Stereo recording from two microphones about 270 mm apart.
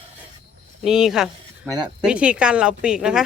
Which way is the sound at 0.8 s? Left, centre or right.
Centre.